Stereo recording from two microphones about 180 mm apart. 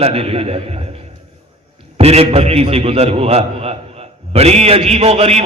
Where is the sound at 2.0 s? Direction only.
35° right (ahead or behind).